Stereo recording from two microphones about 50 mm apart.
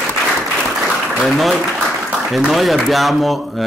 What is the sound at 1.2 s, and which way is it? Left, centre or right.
Speech, centre.